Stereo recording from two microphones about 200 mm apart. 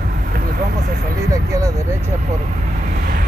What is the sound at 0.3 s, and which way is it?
Vehicle, 45° right (ahead or behind).